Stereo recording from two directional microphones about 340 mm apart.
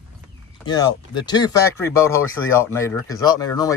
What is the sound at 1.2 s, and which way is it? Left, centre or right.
Speech, centre.